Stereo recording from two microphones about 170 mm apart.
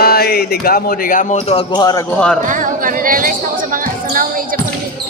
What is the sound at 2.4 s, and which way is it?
Speech, 50° right (ahead or behind).